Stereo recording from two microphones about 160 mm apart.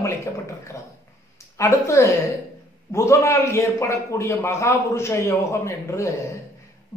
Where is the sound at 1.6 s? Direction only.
20° left (ahead or behind).